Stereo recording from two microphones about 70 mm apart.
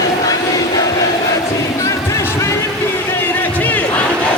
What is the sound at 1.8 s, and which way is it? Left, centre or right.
Music, left.